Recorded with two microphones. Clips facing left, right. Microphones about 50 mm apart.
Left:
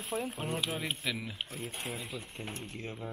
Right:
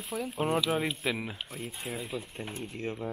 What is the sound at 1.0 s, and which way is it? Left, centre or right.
Speech, right.